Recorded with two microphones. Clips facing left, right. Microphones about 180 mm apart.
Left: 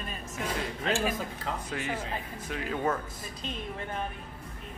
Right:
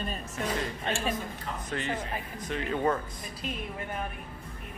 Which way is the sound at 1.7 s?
10° left (ahead or behind).